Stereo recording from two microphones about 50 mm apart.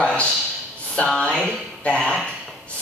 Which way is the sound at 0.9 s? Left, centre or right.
Left.